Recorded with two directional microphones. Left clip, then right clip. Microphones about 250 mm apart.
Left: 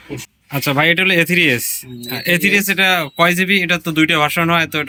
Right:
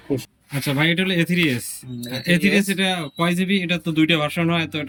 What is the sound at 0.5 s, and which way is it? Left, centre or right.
Speech, centre.